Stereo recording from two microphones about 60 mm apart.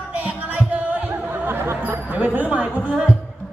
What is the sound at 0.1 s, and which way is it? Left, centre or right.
Music, right.